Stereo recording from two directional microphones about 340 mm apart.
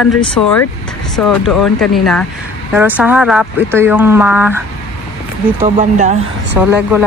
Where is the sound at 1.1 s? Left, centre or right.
Centre.